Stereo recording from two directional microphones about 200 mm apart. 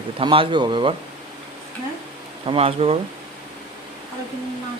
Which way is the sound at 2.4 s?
25° right (ahead or behind).